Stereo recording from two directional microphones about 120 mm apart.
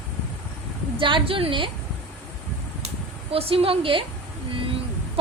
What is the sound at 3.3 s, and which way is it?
Speech, 55° right (ahead or behind).